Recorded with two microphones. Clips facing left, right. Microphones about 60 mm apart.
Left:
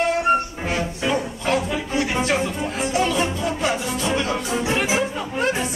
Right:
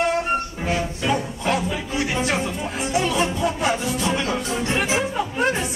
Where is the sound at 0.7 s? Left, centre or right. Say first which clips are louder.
Right 2 dB; centre.